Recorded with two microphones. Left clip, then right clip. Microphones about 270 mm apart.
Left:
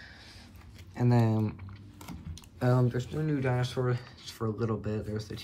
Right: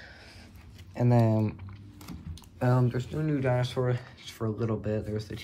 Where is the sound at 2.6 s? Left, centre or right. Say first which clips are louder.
Right 1 dB; right.